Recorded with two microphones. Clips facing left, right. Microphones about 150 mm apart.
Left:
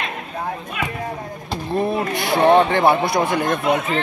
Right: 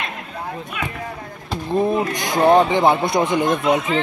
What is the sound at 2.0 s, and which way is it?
Speech, 15° right (ahead or behind).